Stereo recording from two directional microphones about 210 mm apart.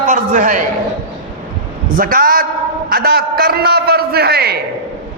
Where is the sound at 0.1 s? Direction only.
40° right (ahead or behind).